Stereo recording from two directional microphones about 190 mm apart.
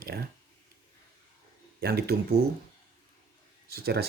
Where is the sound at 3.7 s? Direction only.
55° right (ahead or behind).